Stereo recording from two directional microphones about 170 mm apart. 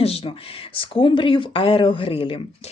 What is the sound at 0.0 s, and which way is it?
Speech, 35° left (ahead or behind).